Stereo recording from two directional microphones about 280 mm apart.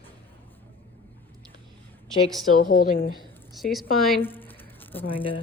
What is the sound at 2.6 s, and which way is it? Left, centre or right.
Speech, left.